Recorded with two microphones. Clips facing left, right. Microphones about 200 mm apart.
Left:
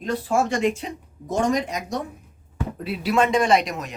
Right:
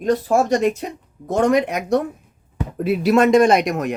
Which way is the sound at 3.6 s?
60° right (ahead or behind).